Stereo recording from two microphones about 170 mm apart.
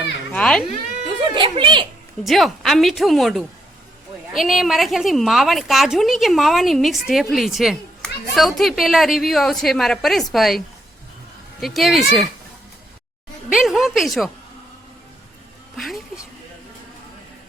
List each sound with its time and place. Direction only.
0.3 s a woman's voice: 5° left (ahead or behind)
1.3 s speech: 30° right (ahead or behind)
2.2 s a woman's voice: centre (ahead or behind)
11.6 s a woman's voice: centre (ahead or behind)
13.5 s a woman's voice: centre (ahead or behind)
15.7 s speech: centre (ahead or behind)